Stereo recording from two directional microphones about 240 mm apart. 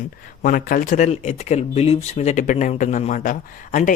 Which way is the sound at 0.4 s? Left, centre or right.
Left.